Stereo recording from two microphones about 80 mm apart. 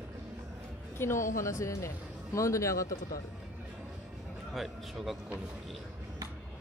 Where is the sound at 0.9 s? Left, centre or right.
Left.